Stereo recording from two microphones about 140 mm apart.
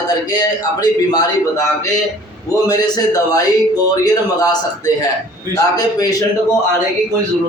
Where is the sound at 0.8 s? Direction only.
30° left (ahead or behind).